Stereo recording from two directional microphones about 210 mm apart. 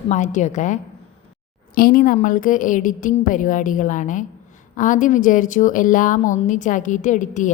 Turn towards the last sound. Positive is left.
turn(degrees=35)  # may be behind; listen again after turning